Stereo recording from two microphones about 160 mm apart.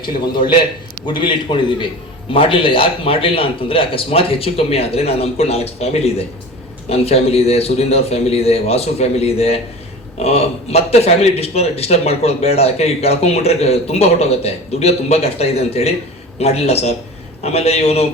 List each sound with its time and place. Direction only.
0.0 s a man's voice: 30° left (ahead or behind)